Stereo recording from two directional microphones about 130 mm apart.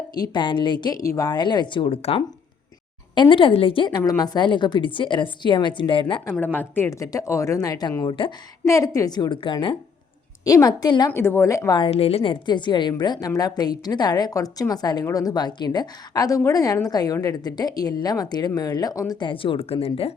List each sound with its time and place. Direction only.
0.1 s a woman's voice: 35° left (ahead or behind)
6.3 s speech: 15° left (ahead or behind); by 8.3 s 35° left (ahead or behind)
8.6 s a woman's voice: 25° left (ahead or behind)
10.4 s speech: 30° left (ahead or behind)
11.1 s speech: 20° left (ahead or behind)
11.8 s a woman's voice: 50° left (ahead or behind); by 19.3 s 30° left (ahead or behind)
19.3 s speech: 40° left (ahead or behind)